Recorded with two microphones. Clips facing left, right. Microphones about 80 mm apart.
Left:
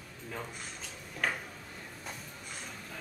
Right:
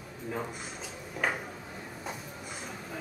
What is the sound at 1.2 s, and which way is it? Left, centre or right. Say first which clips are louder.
Speech: right 2 dB; centre.